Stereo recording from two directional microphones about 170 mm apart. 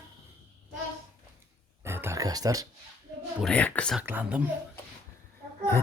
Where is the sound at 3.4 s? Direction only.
5° left (ahead or behind).